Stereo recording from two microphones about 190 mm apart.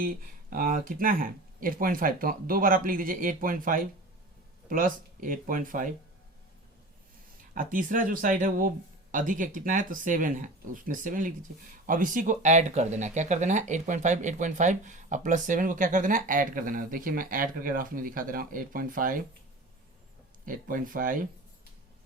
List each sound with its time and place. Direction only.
0.5 s speech: 45° right (ahead or behind)
7.5 s speech: 45° right (ahead or behind)
20.4 s speech: 45° right (ahead or behind)